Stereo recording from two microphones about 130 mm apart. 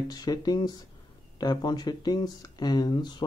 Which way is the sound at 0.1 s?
30° left (ahead or behind).